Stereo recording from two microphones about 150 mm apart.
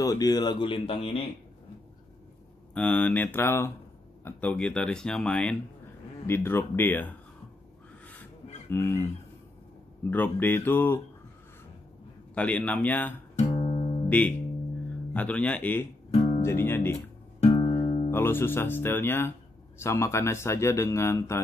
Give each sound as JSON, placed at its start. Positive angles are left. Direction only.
{"t": 0.0, "sound": "speech", "side_deg": 25}
{"t": 2.7, "sound": "speech", "side_deg": 10}
{"t": 8.6, "sound": "speech", "side_deg": 15}
{"t": 12.4, "sound": "speech", "side_deg": 10}
{"t": 13.4, "sound": "music", "side_deg": 40}
{"t": 14.0, "sound": "speech", "side_deg": 10}
{"t": 16.1, "sound": "guitar", "side_deg": 45}
{"t": 16.3, "sound": "speech", "side_deg": 15}
{"t": 17.4, "sound": "music", "side_deg": 40}
{"t": 18.1, "sound": "speech", "side_deg": 15}